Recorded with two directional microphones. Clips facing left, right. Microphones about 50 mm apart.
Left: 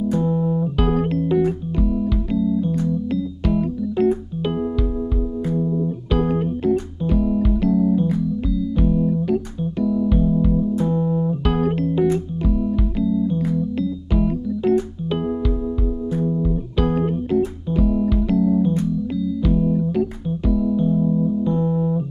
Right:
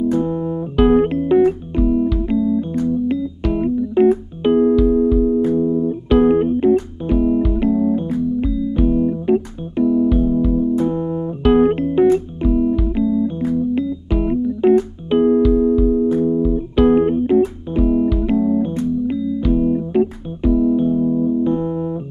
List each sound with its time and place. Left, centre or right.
0.2 s music: right
3.5 s keyboard: right
4.8 s music: centre
6.1 s keyboard: right
7.6 s music: right
20.4 s keyboard: right
21.5 s music: right